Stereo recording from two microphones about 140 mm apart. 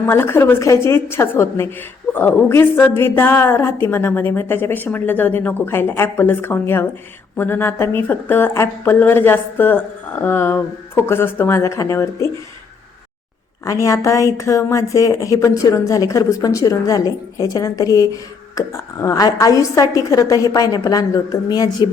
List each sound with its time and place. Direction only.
0.0 s a woman's voice: 15° left (ahead or behind)
13.7 s a woman's voice: 20° left (ahead or behind)